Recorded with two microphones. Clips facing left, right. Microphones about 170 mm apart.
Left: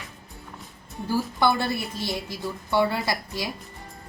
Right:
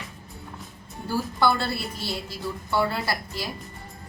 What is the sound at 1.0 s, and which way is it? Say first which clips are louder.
A woman's voice: left 1 dB; 15° left (ahead or behind).